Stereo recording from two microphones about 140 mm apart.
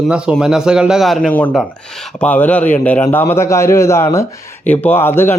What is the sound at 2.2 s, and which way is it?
A man's voice, 10° left (ahead or behind).